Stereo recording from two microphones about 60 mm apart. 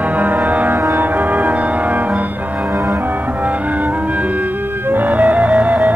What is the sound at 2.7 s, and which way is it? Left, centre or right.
Music, right.